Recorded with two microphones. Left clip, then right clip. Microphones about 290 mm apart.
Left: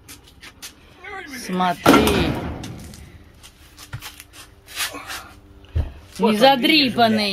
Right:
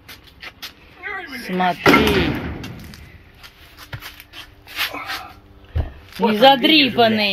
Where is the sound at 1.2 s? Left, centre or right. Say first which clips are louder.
Right 3 dB; centre.